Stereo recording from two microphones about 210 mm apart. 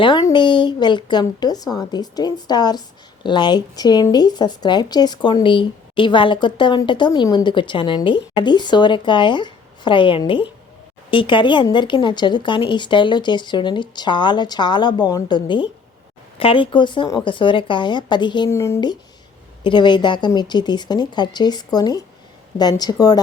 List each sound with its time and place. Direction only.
0.0 s a woman's voice: 20° left (ahead or behind)